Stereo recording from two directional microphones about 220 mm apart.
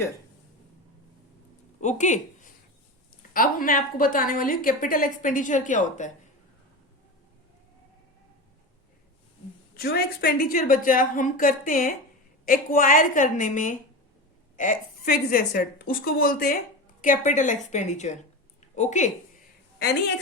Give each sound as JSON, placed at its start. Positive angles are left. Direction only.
{"t": 1.8, "sound": "a woman's voice", "side_deg": 35}
{"t": 9.7, "sound": "a woman's voice", "side_deg": 45}